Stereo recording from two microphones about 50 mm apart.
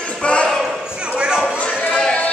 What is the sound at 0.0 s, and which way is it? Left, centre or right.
Basketball bounce, left.